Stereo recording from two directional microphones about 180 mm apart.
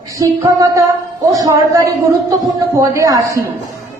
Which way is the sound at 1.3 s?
20° right (ahead or behind).